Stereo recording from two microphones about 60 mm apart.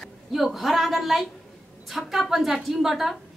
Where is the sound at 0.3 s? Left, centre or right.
Centre.